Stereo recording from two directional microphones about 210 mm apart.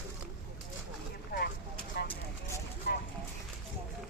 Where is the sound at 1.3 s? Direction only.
45° left (ahead or behind).